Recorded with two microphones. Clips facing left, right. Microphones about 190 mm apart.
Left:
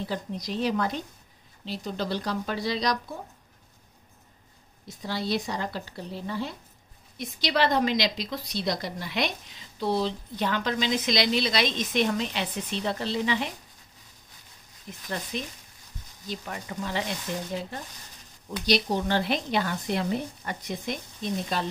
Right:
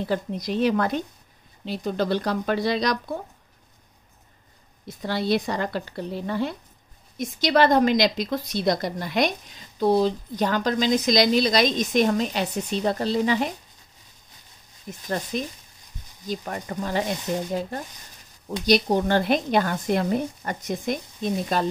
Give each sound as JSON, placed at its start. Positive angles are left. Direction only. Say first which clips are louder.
{"t": 0.0, "sound": "speech", "louder": "right 6 dB", "side_deg": -55}
{"t": 4.8, "sound": "speech", "louder": "right 6 dB", "side_deg": -60}
{"t": 7.2, "sound": "a woman's voice", "louder": "right 6 dB", "side_deg": -45}
{"t": 14.9, "sound": "a woman's voice", "louder": "right 6 dB", "side_deg": -45}